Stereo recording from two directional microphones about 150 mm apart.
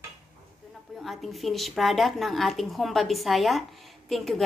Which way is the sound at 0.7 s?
Centre (ahead or behind).